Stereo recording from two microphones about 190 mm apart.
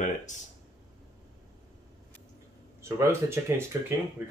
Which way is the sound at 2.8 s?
15° right (ahead or behind).